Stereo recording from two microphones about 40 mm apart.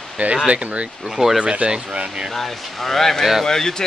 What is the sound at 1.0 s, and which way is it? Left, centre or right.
Speech, centre.